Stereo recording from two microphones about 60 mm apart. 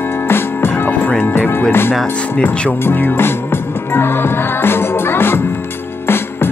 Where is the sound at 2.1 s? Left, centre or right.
Centre.